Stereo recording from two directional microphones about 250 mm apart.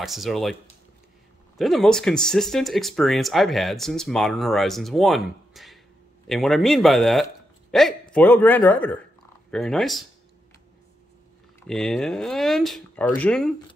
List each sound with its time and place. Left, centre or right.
0.0 s speech: centre
1.6 s a man's voice: centre
11.6 s speech: centre